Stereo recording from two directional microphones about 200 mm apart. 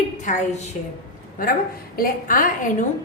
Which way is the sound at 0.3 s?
35° left (ahead or behind).